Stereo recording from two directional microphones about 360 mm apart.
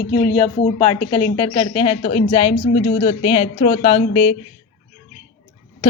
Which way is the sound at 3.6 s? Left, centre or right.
Centre.